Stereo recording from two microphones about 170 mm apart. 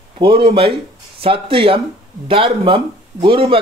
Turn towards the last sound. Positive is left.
turn(degrees=-30)  # may be behind; listen again after turning